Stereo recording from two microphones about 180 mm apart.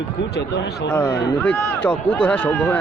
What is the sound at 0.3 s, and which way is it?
Speech, 70° left (ahead or behind).